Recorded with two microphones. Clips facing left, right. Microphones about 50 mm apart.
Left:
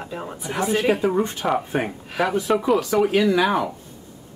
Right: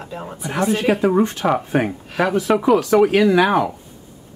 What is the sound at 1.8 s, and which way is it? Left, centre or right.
Speech, centre.